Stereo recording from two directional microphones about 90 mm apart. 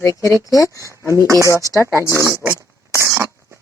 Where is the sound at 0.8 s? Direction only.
35° right (ahead or behind).